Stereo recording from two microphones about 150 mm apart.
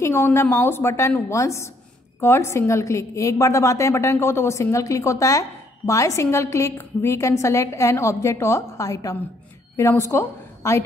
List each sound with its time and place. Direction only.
0.0 s a woman's voice: 15° left (ahead or behind)